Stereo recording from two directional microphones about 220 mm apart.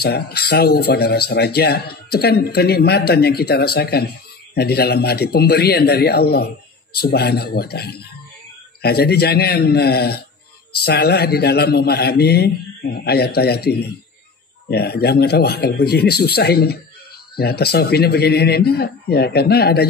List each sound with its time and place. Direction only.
0.0 s speech: 45° left (ahead or behind)